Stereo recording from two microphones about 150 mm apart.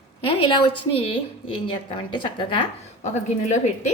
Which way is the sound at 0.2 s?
35° left (ahead or behind).